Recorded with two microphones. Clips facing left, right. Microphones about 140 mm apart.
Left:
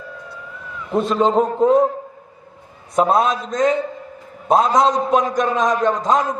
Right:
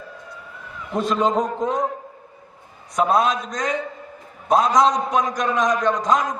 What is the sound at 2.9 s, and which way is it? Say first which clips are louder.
A man's voice: left 2 dB; 30° left (ahead or behind).